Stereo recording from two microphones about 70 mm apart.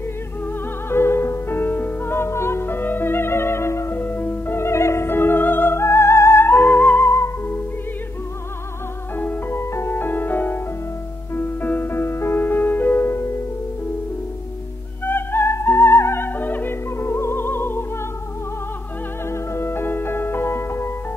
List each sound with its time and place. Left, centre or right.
0.5 s music: left
7.1 s music: left
9.2 s music: left
9.6 s music: left
15.0 s music: left
16.9 s music: left
19.2 s music: left